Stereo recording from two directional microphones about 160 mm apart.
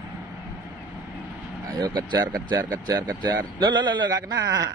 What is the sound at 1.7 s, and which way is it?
A man's voice, 25° right (ahead or behind).